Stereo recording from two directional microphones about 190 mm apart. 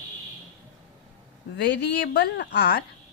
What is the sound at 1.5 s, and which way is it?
A woman's voice, 65° left (ahead or behind).